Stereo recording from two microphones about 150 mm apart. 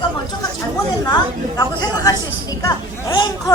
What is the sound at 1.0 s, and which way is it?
A woman's voice, 25° left (ahead or behind).